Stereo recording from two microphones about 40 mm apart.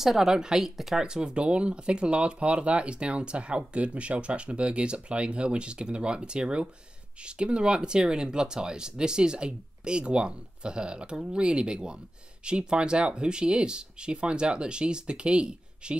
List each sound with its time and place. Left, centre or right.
0.0 s speech: centre
1.0 s speech: right